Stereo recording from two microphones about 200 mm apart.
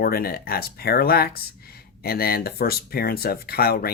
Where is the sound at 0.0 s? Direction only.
50° left (ahead or behind).